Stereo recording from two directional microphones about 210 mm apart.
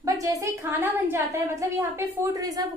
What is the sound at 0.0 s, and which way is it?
A woman's voice, 15° right (ahead or behind).